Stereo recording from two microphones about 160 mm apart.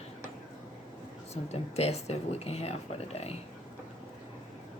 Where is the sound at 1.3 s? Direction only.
40° left (ahead or behind).